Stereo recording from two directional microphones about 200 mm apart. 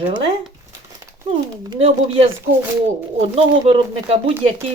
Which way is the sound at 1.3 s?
30° right (ahead or behind).